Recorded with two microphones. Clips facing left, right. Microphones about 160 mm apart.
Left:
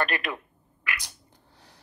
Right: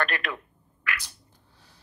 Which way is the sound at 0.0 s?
10° left (ahead or behind).